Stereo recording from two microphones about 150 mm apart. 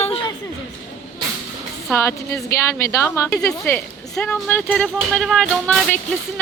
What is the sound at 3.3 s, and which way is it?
A woman's voice, 5° left (ahead or behind).